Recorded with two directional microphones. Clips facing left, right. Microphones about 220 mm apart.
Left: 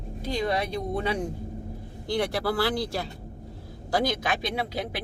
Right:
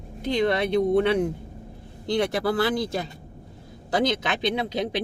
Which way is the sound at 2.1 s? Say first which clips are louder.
Right 3 dB; 20° right (ahead or behind).